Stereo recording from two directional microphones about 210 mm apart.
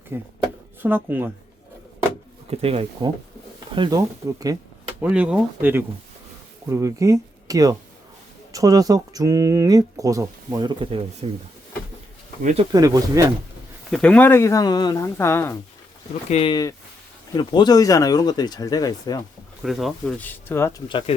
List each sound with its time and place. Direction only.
0.1 s speech: 10° right (ahead or behind)
2.5 s speech: 30° right (ahead or behind)
3.8 s speech: 20° right (ahead or behind)
4.9 s speech: 5° right (ahead or behind); by 11.3 s 25° right (ahead or behind)
12.4 s speech: 35° right (ahead or behind)
12.7 s speech: 15° right (ahead or behind)
13.9 s speech: 5° left (ahead or behind)
16.3 s speech: 25° left (ahead or behind)
19.6 s speech: centre (ahead or behind)